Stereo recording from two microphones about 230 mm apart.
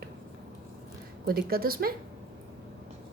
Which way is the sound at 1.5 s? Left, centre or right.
Right.